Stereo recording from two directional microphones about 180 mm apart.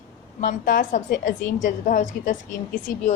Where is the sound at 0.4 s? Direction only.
50° left (ahead or behind).